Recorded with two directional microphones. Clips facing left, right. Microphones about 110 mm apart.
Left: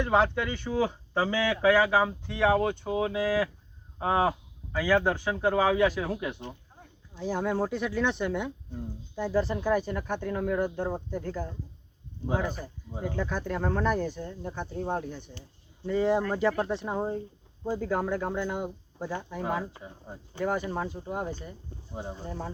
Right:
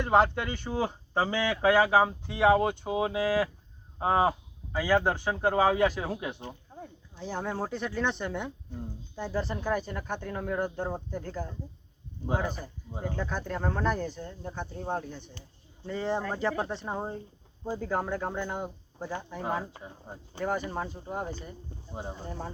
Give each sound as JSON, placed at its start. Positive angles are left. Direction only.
{"t": 0.0, "sound": "speech", "side_deg": -5}
{"t": 7.2, "sound": "speech", "side_deg": 5}
{"t": 19.6, "sound": "speech", "side_deg": -15}
{"t": 20.4, "sound": "speech", "side_deg": 0}